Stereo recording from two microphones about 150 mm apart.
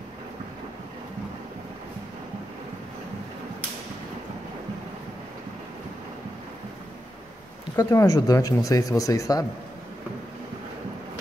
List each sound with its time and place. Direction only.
7.7 s speech: 20° left (ahead or behind)